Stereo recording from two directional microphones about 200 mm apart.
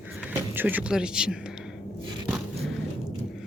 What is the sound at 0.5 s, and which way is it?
Speech, 10° right (ahead or behind).